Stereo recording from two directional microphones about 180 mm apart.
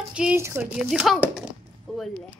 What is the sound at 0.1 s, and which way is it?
Speech, 5° right (ahead or behind).